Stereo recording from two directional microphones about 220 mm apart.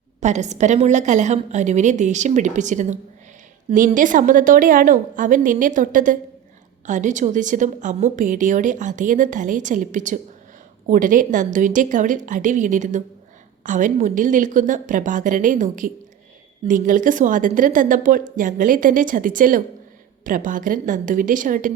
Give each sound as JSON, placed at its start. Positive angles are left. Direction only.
{"t": 0.2, "sound": "a woman's voice", "side_deg": -30}